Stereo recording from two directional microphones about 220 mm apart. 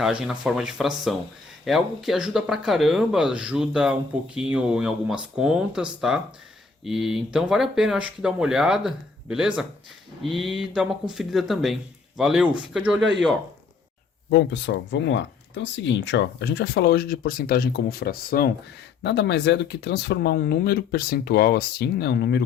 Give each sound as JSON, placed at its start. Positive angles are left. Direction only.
{"t": 0.0, "sound": "speech", "side_deg": -5}
{"t": 13.0, "sound": "speech", "side_deg": -55}
{"t": 14.3, "sound": "speech", "side_deg": 50}